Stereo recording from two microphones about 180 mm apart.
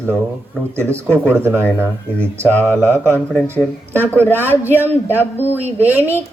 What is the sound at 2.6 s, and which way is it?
Speech, 15° right (ahead or behind).